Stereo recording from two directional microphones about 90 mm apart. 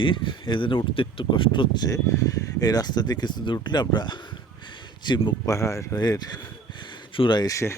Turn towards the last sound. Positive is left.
turn(degrees=30)  # may be behind; listen again after turning